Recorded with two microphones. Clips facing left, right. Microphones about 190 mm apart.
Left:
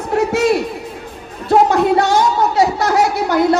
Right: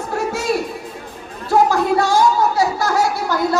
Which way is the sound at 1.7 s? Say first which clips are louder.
Left 3 dB; 20° left (ahead or behind).